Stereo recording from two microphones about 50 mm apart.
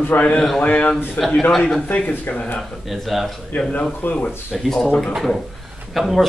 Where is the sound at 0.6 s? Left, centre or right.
Left.